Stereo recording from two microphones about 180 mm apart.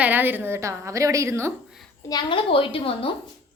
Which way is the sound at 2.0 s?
25° left (ahead or behind).